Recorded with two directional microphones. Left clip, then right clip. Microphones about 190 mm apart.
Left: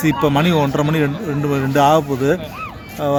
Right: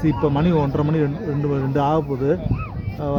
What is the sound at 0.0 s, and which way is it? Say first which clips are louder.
Speech: left 4 dB; 25° left (ahead or behind).